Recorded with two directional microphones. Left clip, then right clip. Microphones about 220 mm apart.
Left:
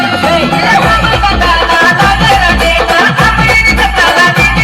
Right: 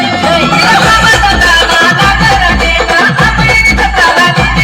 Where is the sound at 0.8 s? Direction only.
50° right (ahead or behind); by 2.1 s 30° right (ahead or behind).